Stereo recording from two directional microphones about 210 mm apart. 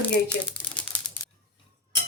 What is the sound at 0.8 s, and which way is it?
Crumpling, 5° left (ahead or behind).